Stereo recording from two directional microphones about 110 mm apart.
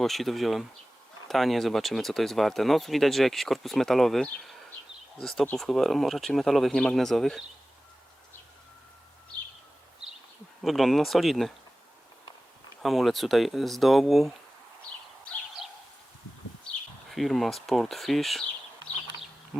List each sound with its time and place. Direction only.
0.0 s speech: centre (ahead or behind)
5.5 s speech: centre (ahead or behind)
10.6 s speech: centre (ahead or behind)
12.8 s speech: centre (ahead or behind)
17.1 s speech: centre (ahead or behind)